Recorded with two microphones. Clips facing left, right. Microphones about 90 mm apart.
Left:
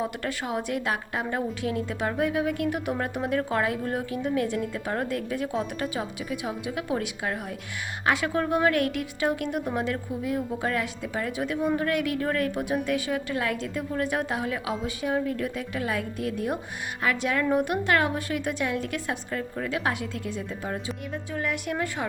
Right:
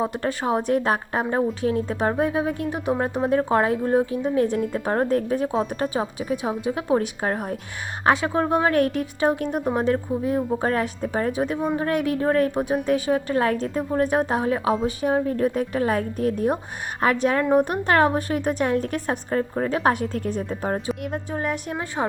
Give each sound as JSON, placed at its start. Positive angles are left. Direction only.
{"t": 0.0, "sound": "speech", "side_deg": -30}